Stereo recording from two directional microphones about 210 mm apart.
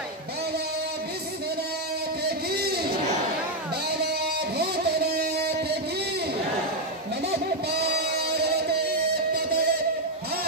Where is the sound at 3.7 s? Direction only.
50° right (ahead or behind).